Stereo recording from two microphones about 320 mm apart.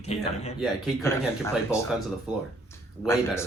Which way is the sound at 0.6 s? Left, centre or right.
Centre.